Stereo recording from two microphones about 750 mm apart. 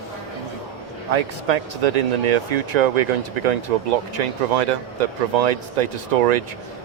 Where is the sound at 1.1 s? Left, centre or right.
Right.